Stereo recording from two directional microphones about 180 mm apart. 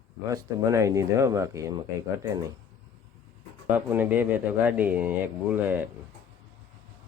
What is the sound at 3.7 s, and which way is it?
Speech, 10° right (ahead or behind).